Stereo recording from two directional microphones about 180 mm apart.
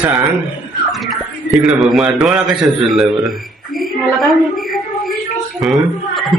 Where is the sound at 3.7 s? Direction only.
Centre (ahead or behind).